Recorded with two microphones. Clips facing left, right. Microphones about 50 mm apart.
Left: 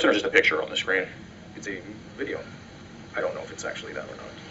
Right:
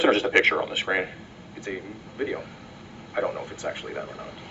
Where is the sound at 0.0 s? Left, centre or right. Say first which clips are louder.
Even; centre.